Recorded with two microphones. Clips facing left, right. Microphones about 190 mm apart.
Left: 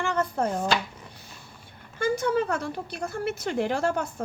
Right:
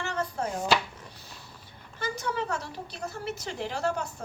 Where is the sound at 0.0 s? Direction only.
55° left (ahead or behind).